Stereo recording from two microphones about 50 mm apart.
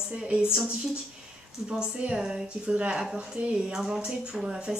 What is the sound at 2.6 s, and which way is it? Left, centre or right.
Speech, right.